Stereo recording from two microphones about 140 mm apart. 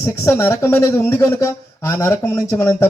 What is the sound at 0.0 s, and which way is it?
Speech, 20° left (ahead or behind).